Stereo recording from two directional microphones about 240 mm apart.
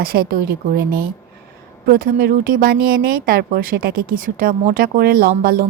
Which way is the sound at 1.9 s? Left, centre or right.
Right.